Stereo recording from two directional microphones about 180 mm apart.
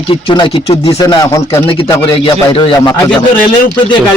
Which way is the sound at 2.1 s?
30° left (ahead or behind).